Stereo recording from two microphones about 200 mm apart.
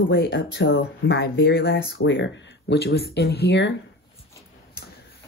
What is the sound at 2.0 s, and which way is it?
Speech, 65° left (ahead or behind).